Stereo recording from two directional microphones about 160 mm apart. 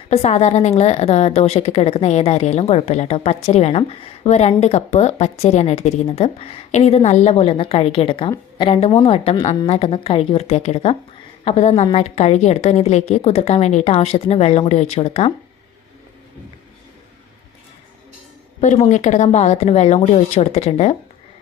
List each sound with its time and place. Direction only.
0.1 s a woman's voice: 40° left (ahead or behind)
18.6 s speech: 50° left (ahead or behind)